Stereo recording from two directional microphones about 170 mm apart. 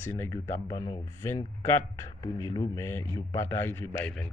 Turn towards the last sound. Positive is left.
turn(degrees=15)  # may be behind; listen again after turning